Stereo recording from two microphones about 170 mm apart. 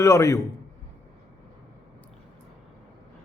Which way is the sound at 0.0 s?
15° left (ahead or behind).